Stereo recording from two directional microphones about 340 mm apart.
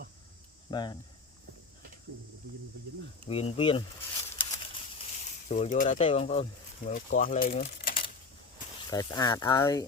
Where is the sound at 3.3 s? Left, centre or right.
Centre.